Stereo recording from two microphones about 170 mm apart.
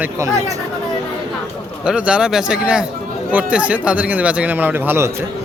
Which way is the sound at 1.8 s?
5° right (ahead or behind).